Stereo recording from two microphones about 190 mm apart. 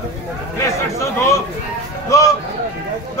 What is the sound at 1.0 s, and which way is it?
Speech, 15° left (ahead or behind).